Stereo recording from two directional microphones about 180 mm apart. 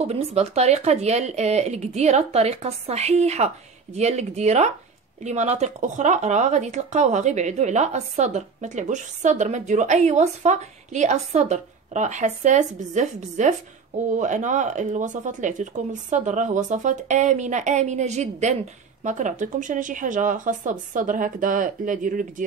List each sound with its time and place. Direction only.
0.0 s speech: 35° right (ahead or behind)